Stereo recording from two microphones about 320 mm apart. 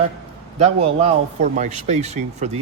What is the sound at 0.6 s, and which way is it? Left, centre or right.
Speech, centre.